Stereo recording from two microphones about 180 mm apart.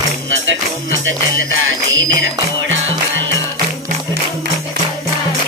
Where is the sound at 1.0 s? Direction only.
90° right.